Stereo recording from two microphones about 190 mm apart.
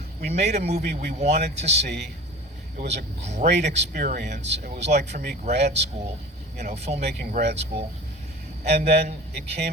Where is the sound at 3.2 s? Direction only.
40° right (ahead or behind).